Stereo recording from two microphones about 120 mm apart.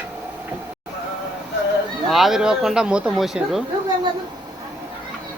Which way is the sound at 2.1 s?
Centre (ahead or behind).